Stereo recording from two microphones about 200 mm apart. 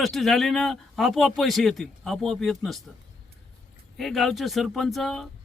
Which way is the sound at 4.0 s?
Centre (ahead or behind).